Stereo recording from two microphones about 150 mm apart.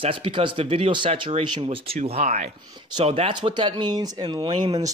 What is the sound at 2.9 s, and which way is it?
Speech, 40° right (ahead or behind).